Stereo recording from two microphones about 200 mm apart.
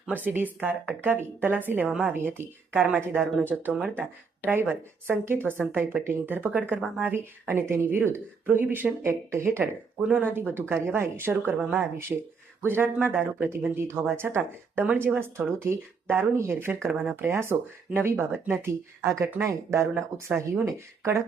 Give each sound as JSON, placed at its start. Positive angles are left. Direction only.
{"t": 0.0, "sound": "speech", "side_deg": -10}
{"t": 7.0, "sound": "speech", "side_deg": -10}